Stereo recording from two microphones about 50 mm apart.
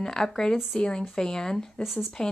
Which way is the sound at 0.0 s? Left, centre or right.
Centre.